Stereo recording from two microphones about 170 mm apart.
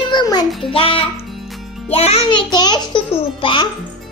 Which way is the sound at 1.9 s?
35° left (ahead or behind).